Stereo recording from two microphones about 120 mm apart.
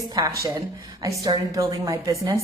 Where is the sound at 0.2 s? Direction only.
30° right (ahead or behind).